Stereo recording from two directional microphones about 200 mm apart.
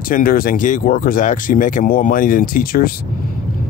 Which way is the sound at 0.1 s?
45° left (ahead or behind).